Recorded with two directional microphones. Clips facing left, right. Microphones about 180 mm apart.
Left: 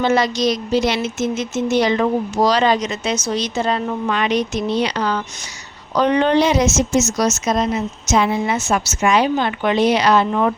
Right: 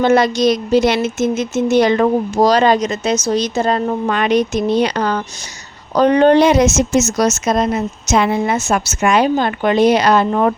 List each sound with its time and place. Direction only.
0.0 s speech: 55° right (ahead or behind)